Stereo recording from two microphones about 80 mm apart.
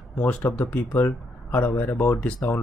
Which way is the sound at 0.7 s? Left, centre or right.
Left.